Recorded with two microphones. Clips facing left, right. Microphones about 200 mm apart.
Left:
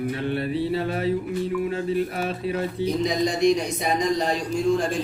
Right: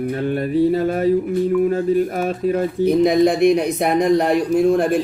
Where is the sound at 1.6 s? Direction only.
45° right (ahead or behind).